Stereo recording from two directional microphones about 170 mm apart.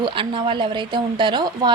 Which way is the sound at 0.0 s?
30° right (ahead or behind).